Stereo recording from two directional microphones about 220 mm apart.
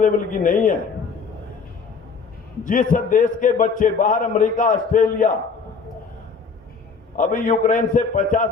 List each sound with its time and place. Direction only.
0.0 s a man's voice: 35° left (ahead or behind)
2.6 s a man's voice: 35° left (ahead or behind)
7.2 s a man's voice: 35° left (ahead or behind)